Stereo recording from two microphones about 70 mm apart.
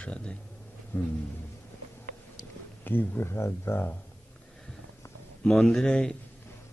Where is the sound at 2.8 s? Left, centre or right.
Left.